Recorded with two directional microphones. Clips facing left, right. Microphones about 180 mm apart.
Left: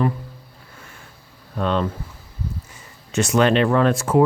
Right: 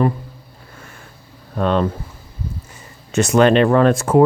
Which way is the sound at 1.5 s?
50° right (ahead or behind).